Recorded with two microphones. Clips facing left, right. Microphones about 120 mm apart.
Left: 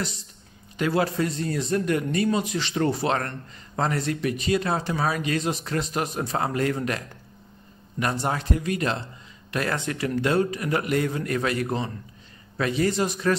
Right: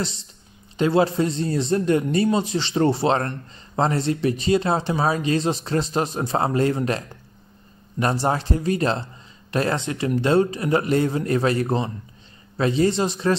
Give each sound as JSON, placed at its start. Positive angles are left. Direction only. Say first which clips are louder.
{"t": 0.0, "sound": "a man's voice", "louder": "right 3 dB", "side_deg": -25}
{"t": 8.0, "sound": "a man's voice", "louder": "right 4 dB", "side_deg": -30}